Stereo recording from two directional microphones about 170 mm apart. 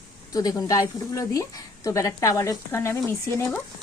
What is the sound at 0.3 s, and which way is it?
A woman's voice, 20° left (ahead or behind).